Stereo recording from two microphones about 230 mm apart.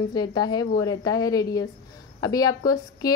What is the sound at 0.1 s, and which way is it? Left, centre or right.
Speech, centre.